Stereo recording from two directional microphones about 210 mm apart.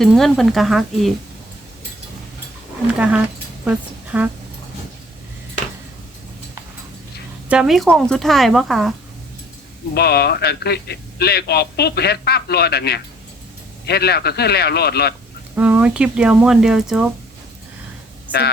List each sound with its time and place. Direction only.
0.0 s speech: centre (ahead or behind)
3.6 s speech: 5° right (ahead or behind)
7.4 s speech: 5° right (ahead or behind)
9.9 s speech: 50° left (ahead or behind)
15.5 s speech: 5° right (ahead or behind)
18.3 s speech: 50° left (ahead or behind)